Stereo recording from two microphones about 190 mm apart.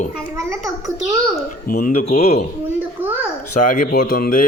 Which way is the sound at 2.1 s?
35° left (ahead or behind).